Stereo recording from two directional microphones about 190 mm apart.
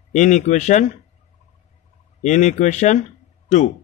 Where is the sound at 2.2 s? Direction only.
40° left (ahead or behind).